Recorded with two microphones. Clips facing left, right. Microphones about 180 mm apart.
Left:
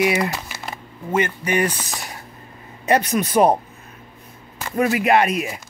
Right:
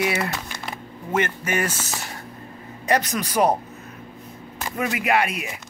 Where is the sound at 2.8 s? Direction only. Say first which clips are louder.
Left 4 dB; 20° left (ahead or behind).